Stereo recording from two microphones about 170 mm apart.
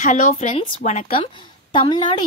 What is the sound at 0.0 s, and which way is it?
A woman's voice, 50° left (ahead or behind).